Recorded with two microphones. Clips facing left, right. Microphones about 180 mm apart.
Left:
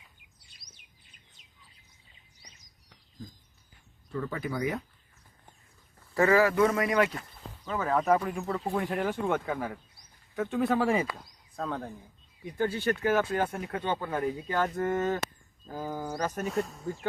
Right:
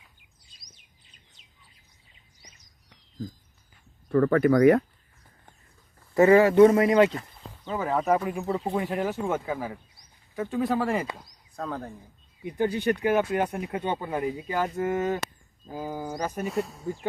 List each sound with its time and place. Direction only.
0.4 s chirp: 65° left (ahead or behind)
4.1 s speech: 60° right (ahead or behind)
6.1 s speech: 25° right (ahead or behind)
7.7 s speech: 10° right (ahead or behind)
8.4 s speech: 20° right (ahead or behind)
8.8 s speech: 5° right (ahead or behind)
12.5 s speech: 15° right (ahead or behind)
16.5 s speech: centre (ahead or behind)